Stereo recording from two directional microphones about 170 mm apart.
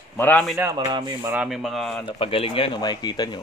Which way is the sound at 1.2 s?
5° right (ahead or behind).